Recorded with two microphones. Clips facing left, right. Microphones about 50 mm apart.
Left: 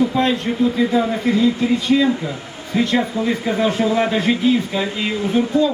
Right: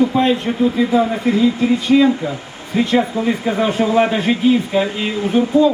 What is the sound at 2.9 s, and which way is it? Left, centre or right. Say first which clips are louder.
A man's voice: right 5 dB; centre.